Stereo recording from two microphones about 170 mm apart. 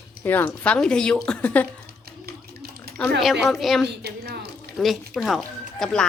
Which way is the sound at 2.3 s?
70° right (ahead or behind).